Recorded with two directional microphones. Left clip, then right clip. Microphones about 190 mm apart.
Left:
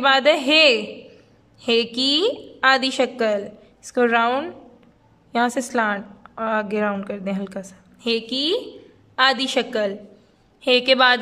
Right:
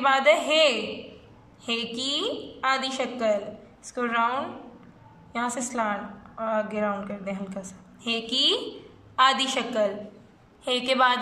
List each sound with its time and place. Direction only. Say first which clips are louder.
0.0 s a woman's voice: left 4 dB; 55° left (ahead or behind)